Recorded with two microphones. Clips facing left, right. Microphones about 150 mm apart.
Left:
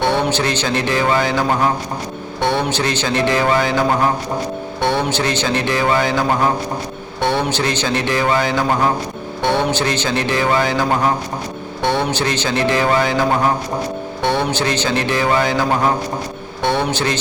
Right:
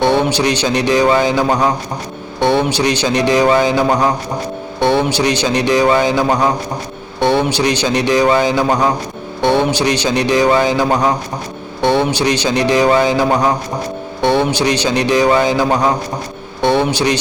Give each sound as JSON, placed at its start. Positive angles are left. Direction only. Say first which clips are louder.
{"t": 0.0, "sound": "a man's voice", "louder": "right 4 dB", "side_deg": -15}
{"t": 16.9, "sound": "a man's voice", "louder": "right 4 dB", "side_deg": -15}